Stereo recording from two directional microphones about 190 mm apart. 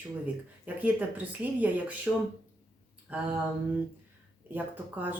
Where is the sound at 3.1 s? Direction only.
10° right (ahead or behind).